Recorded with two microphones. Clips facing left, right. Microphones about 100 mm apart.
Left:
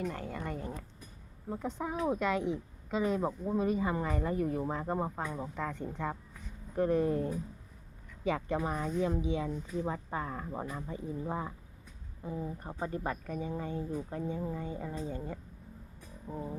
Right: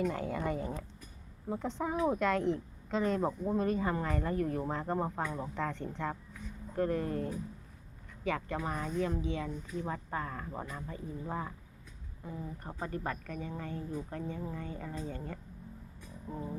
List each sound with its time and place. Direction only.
0.0 s a woman's voice: 5° right (ahead or behind); by 15.4 s 15° left (ahead or behind)
16.3 s speech: 5° left (ahead or behind)